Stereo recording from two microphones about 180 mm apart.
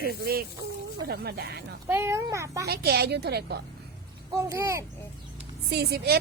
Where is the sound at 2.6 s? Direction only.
60° right (ahead or behind).